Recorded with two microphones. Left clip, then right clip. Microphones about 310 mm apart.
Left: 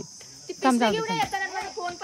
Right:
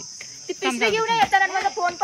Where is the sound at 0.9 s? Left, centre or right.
Right.